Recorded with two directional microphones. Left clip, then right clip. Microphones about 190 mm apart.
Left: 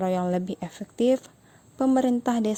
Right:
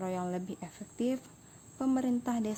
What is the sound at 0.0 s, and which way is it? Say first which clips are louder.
A woman's voice: left 10 dB; 45° left (ahead or behind).